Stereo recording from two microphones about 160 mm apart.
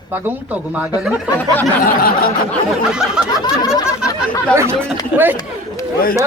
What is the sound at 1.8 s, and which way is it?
Snicker, 65° left (ahead or behind).